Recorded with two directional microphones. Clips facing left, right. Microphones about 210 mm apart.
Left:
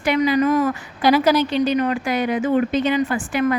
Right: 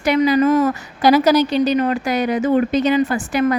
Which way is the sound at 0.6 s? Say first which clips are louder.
Right 3 dB; 40° right (ahead or behind).